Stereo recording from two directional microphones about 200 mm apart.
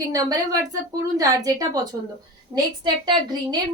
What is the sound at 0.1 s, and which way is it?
A woman's voice, 20° right (ahead or behind).